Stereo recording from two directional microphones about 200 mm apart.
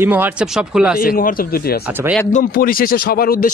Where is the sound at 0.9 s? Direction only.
45° left (ahead or behind).